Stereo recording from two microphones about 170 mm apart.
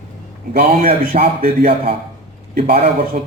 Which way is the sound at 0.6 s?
40° right (ahead or behind).